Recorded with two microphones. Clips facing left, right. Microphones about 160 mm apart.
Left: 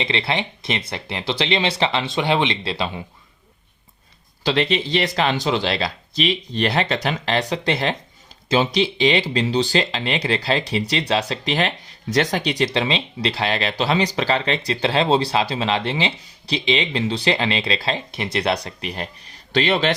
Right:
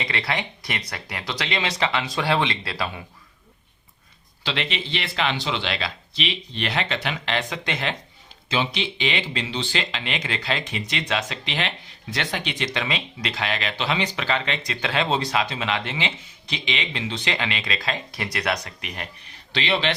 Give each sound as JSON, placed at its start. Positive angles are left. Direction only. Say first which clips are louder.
{"t": 0.0, "sound": "speech", "louder": "left 4 dB", "side_deg": 25}
{"t": 4.4, "sound": "speech", "louder": "left 8 dB", "side_deg": 40}